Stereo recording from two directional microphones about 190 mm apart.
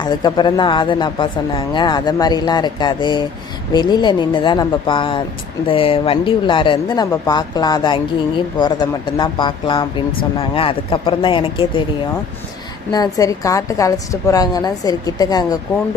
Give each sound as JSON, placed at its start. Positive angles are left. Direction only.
{"t": 0.0, "sound": "speech", "side_deg": 20}
{"t": 12.9, "sound": "speech", "side_deg": 20}